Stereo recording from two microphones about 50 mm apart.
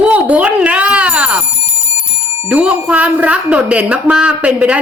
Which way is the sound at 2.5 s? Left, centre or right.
Right.